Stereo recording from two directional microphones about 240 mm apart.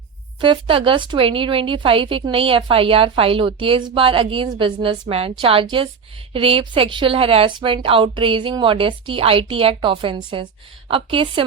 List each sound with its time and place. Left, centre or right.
0.4 s speech: right